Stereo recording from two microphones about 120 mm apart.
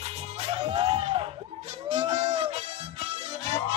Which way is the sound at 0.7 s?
40° right (ahead or behind).